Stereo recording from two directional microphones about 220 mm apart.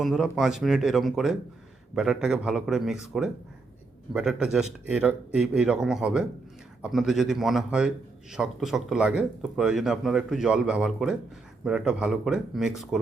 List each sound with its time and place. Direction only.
0.0 s a man's voice: centre (ahead or behind)